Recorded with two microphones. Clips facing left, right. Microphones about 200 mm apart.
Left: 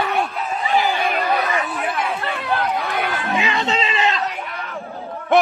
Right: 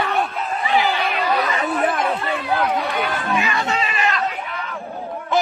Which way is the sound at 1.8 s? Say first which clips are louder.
Right 4 dB; 50° right (ahead or behind).